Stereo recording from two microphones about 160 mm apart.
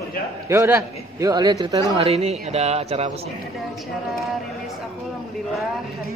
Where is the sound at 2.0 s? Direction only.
40° right (ahead or behind).